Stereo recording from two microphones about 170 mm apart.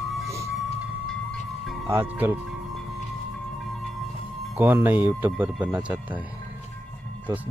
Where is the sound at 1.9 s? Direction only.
15° right (ahead or behind).